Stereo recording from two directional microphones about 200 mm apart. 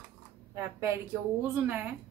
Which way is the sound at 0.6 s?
15° right (ahead or behind).